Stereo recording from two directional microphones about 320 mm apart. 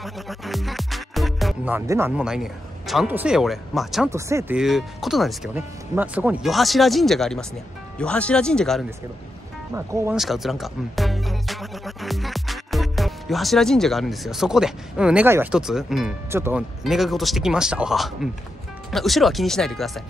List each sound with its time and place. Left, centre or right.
0.0 s speech: centre